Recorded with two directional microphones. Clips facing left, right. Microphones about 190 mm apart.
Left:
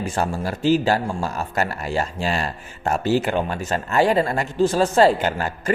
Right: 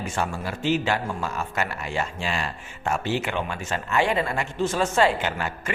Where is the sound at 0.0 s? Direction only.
35° left (ahead or behind).